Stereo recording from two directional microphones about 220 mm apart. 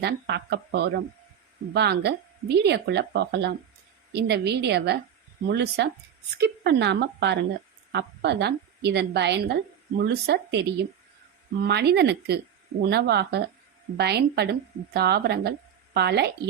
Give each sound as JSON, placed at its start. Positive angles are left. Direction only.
{"t": 0.0, "sound": "a woman's voice", "side_deg": -50}